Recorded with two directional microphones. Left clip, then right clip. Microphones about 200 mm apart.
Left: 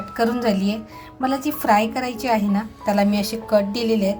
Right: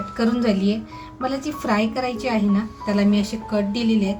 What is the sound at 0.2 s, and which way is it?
A woman's voice, 40° left (ahead or behind).